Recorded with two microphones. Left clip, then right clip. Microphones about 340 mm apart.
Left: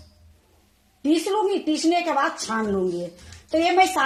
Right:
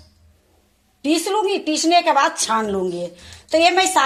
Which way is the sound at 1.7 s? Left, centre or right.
Right.